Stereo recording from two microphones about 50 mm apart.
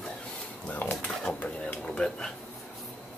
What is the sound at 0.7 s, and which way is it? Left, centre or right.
Speech, left.